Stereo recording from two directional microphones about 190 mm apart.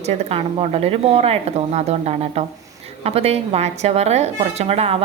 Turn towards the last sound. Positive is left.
turn(degrees=-30)  # may be behind; listen again after turning